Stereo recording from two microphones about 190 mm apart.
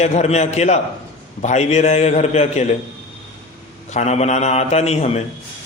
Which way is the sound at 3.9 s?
35° left (ahead or behind).